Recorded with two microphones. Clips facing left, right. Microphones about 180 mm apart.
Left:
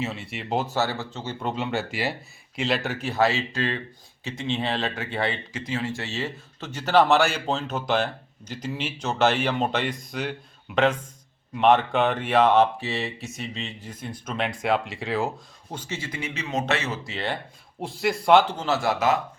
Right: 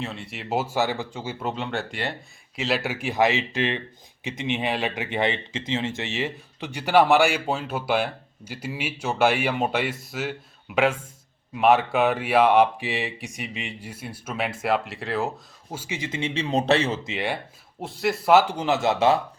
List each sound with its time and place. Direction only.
0.0 s speech: centre (ahead or behind); by 17.4 s 15° right (ahead or behind)
17.7 s speech: centre (ahead or behind); by 19.2 s 30° right (ahead or behind)